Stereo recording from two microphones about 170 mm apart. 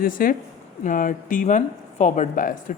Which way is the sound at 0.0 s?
55° left (ahead or behind).